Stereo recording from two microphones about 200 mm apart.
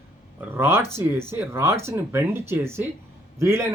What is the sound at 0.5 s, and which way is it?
Speech, 10° right (ahead or behind).